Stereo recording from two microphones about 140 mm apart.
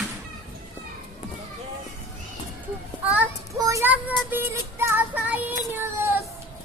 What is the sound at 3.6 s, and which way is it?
Child singing, 20° right (ahead or behind).